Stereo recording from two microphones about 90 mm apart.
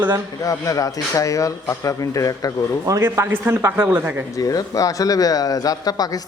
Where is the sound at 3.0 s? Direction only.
25° right (ahead or behind).